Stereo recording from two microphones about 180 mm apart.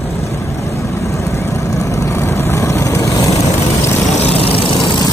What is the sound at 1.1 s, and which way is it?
Vehicle, 15° left (ahead or behind).